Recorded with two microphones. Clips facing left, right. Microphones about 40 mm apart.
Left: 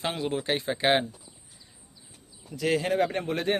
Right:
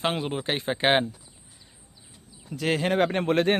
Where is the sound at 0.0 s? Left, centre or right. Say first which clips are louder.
Right 2 dB; right.